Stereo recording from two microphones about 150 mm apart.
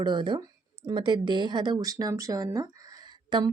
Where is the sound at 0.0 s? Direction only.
30° right (ahead or behind).